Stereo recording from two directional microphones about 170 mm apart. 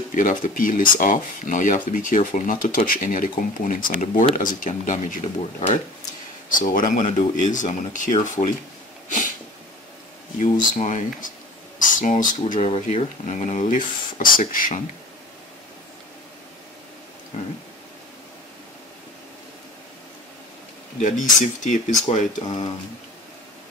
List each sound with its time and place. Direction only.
0.1 s speech: 50° left (ahead or behind)
10.4 s speech: 45° left (ahead or behind)
17.3 s a sound: 40° left (ahead or behind)
21.0 s speech: 45° left (ahead or behind)